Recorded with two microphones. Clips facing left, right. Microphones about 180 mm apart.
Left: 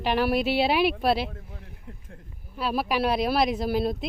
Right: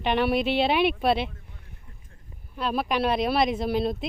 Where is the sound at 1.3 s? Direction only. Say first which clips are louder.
Left 7 dB; 75° left (ahead or behind).